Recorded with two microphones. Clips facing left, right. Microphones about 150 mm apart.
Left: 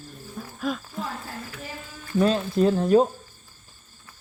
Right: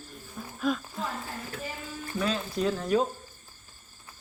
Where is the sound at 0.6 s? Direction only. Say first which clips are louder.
Even; centre (ahead or behind).